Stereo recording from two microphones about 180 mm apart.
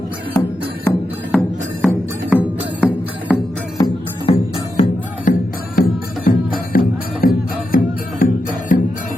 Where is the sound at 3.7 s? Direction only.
25° left (ahead or behind).